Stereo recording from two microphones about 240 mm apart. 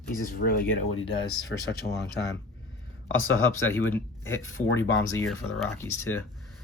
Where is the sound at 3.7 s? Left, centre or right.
Centre.